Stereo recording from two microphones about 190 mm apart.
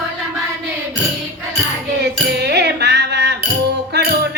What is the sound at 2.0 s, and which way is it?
Music, 60° right (ahead or behind).